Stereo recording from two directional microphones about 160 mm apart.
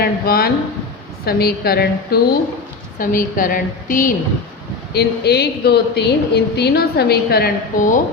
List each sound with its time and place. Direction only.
0.0 s a woman's voice: 70° left (ahead or behind)
3.0 s a woman's voice: 60° left (ahead or behind)
4.9 s a woman's voice: 90° left; by 7.9 s 65° left (ahead or behind)